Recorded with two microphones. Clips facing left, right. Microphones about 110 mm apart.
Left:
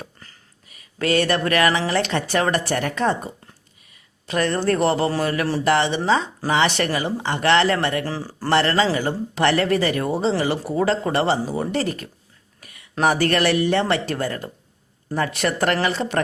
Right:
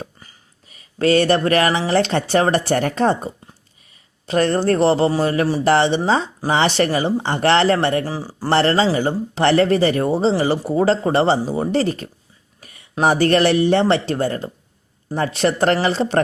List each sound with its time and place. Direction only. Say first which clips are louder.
0.7 s speech: right 5 dB; 30° right (ahead or behind)
4.3 s speech: right 4 dB; 35° right (ahead or behind)
8.0 s speech: right 2 dB; 15° right (ahead or behind)
8.4 s speech: right 3 dB; 30° right (ahead or behind)